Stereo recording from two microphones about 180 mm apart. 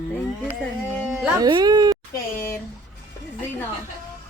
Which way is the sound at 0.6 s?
5° left (ahead or behind).